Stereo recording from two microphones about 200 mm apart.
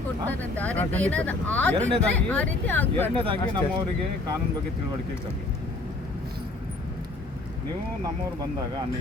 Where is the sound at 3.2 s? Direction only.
25° right (ahead or behind).